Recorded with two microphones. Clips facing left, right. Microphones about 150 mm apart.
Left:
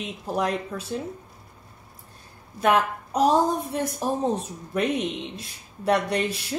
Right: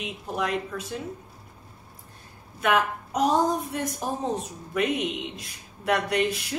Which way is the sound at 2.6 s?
35° left (ahead or behind).